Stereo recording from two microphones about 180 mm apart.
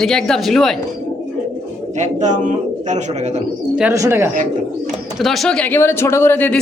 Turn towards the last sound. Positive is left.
turn(degrees=10)  # may be behind; listen again after turning